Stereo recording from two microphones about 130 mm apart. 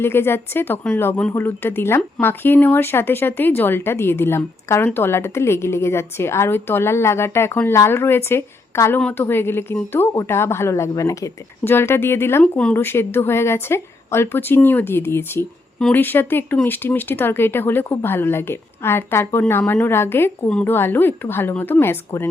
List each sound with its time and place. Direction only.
0.0 s a woman's voice: 15° left (ahead or behind)
12.4 s speech: 5° left (ahead or behind)
12.7 s speech: 20° left (ahead or behind)